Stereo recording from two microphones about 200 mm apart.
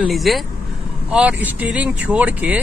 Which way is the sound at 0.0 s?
Centre (ahead or behind).